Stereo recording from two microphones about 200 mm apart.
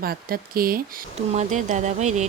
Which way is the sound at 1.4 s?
40° right (ahead or behind).